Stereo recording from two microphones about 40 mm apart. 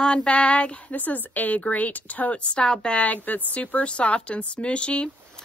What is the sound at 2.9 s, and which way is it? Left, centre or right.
Speech, left.